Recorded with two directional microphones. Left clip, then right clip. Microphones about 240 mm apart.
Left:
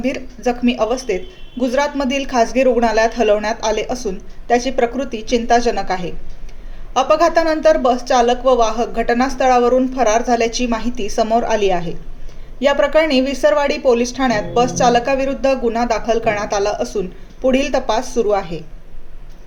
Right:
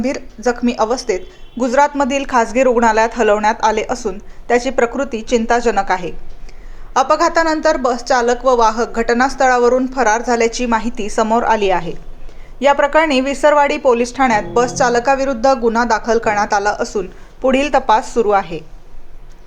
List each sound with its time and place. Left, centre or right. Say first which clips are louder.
0.0 s a woman's voice: right 2 dB; centre